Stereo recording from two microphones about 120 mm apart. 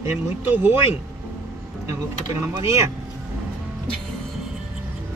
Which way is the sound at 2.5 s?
25° right (ahead or behind).